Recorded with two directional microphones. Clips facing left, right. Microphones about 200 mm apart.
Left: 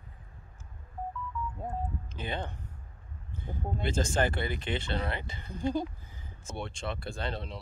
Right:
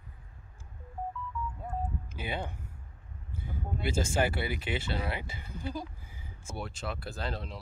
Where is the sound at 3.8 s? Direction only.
10° right (ahead or behind).